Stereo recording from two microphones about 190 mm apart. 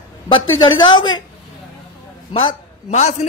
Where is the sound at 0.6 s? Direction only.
25° left (ahead or behind).